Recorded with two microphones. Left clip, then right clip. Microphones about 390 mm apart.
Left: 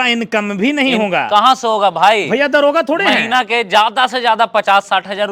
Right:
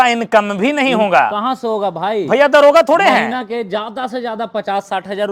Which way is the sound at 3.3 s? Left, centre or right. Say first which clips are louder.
Left 7 dB; left.